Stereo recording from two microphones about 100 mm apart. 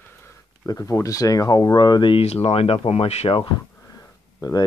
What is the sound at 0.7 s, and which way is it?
Speech, 35° left (ahead or behind).